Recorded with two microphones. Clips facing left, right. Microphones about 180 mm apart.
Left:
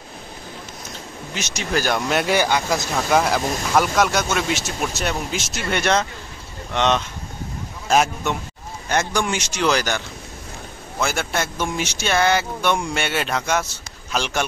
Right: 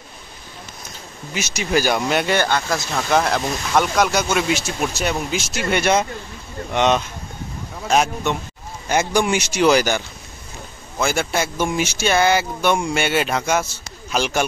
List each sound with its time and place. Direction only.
1.3 s speech: 10° right (ahead or behind)
7.9 s speech: centre (ahead or behind)
8.9 s speech: 10° right (ahead or behind)